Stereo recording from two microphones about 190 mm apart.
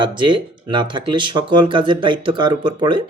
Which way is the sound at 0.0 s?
25° right (ahead or behind).